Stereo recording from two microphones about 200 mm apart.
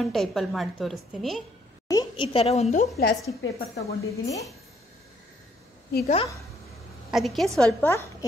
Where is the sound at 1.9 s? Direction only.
20° left (ahead or behind).